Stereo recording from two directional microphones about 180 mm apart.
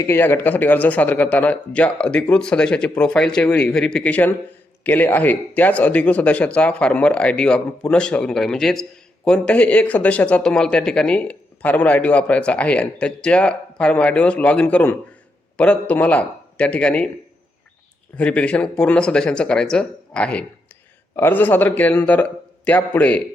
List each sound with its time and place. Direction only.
0.0 s speech: 10° left (ahead or behind)
18.2 s speech: 5° left (ahead or behind)